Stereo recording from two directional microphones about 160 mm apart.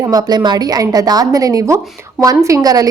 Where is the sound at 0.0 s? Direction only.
25° right (ahead or behind).